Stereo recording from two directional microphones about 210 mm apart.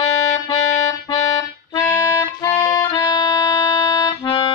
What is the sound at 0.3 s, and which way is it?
Music, 15° left (ahead or behind).